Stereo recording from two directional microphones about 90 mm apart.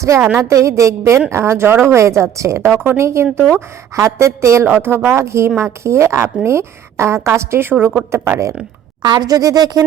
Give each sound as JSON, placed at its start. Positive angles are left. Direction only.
{"t": 0.0, "sound": "a woman's voice", "side_deg": -35}
{"t": 9.0, "sound": "speech", "side_deg": -55}